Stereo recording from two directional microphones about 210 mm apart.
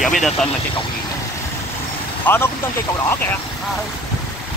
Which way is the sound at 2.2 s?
10° left (ahead or behind).